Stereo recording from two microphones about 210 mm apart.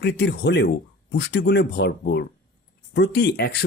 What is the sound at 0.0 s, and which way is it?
Speech, 50° left (ahead or behind).